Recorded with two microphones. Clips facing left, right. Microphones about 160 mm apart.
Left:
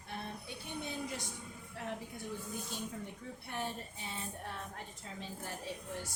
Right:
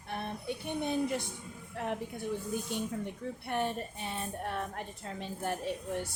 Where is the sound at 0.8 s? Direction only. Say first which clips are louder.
Right 11 dB; 60° right (ahead or behind).